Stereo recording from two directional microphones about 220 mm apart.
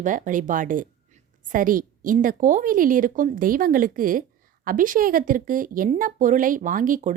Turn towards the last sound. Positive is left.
turn(degrees=-35)  # may be behind; listen again after turning